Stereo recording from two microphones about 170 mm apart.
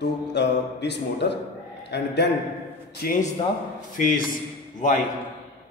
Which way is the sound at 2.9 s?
65° left (ahead or behind).